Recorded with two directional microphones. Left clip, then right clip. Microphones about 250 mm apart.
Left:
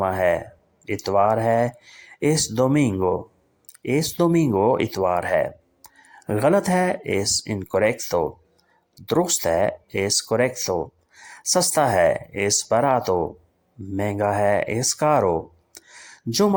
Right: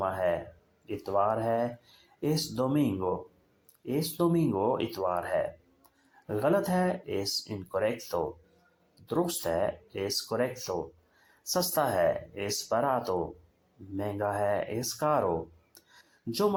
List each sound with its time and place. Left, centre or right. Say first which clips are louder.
0.0 s speech: left 9 dB; left